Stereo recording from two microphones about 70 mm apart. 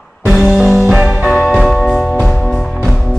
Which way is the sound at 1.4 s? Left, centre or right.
Centre.